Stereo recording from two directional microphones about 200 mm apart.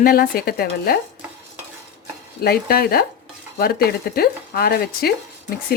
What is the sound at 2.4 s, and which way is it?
Speech, 50° left (ahead or behind).